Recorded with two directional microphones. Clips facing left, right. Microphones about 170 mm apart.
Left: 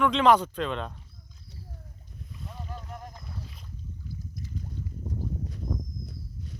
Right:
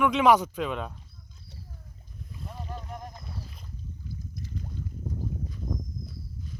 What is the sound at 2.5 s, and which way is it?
Boat, 5° right (ahead or behind).